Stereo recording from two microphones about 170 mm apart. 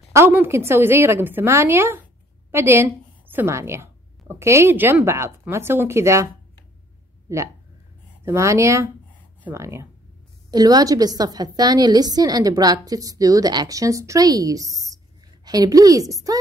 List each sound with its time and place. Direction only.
0.1 s a woman's voice: 15° right (ahead or behind)
7.3 s a woman's voice: 15° right (ahead or behind)